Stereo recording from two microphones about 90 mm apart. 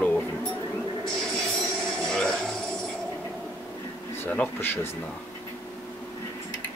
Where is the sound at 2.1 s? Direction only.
10° left (ahead or behind).